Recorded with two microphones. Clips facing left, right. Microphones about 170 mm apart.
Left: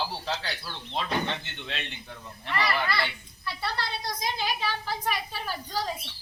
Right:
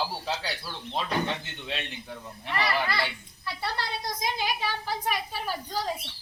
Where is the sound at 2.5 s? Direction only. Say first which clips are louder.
Even; 15° right (ahead or behind).